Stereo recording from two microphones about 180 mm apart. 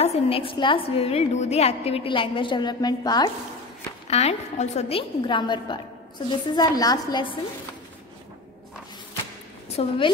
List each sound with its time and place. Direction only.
0.0 s a woman's voice: 35° left (ahead or behind)
4.1 s a woman's voice: 35° left (ahead or behind)
9.8 s a woman's voice: 30° left (ahead or behind)